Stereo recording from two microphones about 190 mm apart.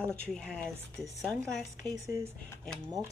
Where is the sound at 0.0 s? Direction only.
5° left (ahead or behind).